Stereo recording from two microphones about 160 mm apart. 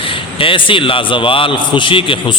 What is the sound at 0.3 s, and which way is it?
A man's voice, 35° left (ahead or behind).